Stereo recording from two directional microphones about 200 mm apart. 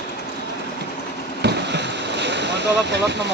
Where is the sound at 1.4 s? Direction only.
60° right (ahead or behind).